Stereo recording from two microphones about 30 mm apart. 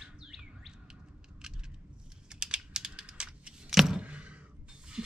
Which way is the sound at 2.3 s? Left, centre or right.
Right.